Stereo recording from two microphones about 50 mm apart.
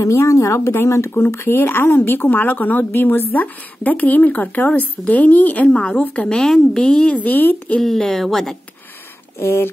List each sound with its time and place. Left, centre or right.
0.0 s speech: left
1.5 s speech: left
5.7 s a woman's voice: left
6.2 s speech: centre
7.2 s speech: left
7.8 s speech: centre
9.4 s speech: left